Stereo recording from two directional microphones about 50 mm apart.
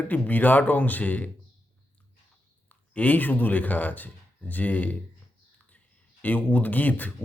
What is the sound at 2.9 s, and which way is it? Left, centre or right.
Speech, left.